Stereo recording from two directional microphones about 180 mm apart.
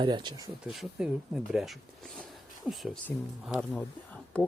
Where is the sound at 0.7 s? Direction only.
5° right (ahead or behind).